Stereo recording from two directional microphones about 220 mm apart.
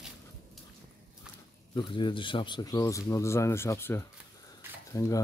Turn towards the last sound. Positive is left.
turn(degrees=15)  # may be behind; listen again after turning